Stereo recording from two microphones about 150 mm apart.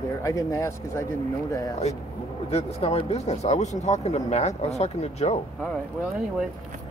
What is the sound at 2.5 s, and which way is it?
Speech, 45° left (ahead or behind).